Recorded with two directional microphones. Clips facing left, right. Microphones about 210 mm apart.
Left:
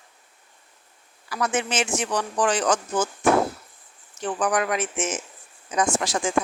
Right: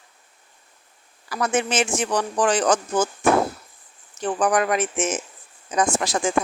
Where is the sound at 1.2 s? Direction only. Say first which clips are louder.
Right 3 dB; 40° right (ahead or behind).